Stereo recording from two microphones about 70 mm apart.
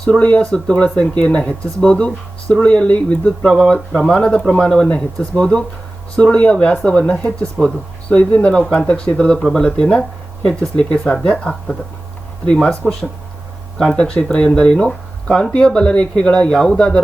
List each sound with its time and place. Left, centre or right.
0.0 s speech: centre
4.1 s speech: centre
13.7 s speech: centre